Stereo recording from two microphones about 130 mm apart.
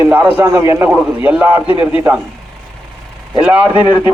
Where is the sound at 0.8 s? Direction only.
10° right (ahead or behind).